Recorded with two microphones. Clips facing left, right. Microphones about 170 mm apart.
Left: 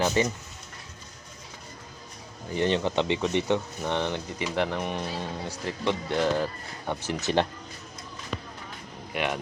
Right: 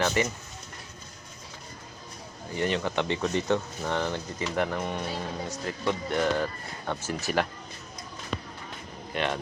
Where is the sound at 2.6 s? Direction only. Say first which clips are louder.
Left 3 dB; 20° left (ahead or behind).